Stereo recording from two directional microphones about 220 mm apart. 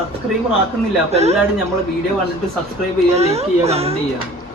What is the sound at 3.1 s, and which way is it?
Speech, 30° right (ahead or behind).